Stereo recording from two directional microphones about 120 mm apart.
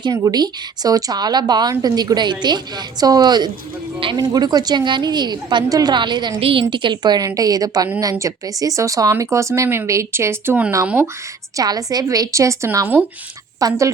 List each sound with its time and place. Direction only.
0.0 s a woman's voice: 30° right (ahead or behind)
11.5 s speech: 30° right (ahead or behind)